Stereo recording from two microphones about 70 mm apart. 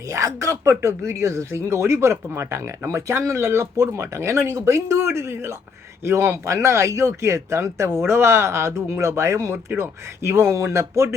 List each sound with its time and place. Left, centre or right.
0.1 s speech: right